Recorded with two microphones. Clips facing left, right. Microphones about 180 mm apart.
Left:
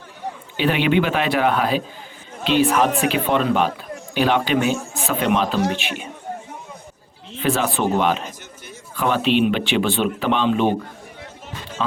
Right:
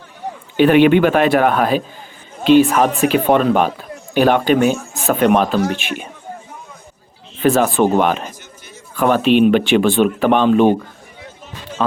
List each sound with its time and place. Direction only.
0.5 s speech: 50° right (ahead or behind)
7.3 s speech: 45° right (ahead or behind)